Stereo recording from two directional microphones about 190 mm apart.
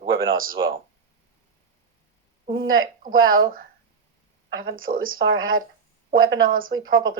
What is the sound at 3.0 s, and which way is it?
Speech, 45° right (ahead or behind).